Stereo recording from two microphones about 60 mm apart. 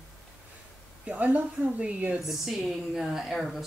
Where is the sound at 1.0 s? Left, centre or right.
Right.